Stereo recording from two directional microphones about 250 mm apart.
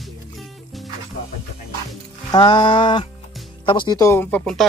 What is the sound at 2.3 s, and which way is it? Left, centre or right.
Speech, centre.